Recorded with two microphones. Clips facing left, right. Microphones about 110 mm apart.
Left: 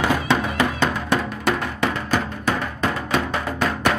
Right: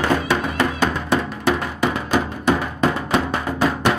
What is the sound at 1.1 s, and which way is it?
Music, centre (ahead or behind).